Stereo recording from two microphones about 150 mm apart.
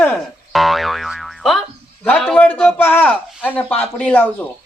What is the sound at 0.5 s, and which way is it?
Boing, centre (ahead or behind).